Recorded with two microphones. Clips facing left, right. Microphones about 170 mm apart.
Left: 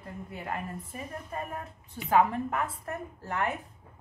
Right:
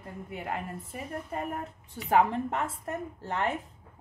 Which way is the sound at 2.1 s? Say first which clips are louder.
Even; 25° right (ahead or behind).